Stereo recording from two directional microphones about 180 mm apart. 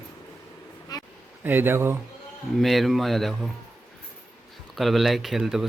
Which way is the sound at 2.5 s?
Centre (ahead or behind).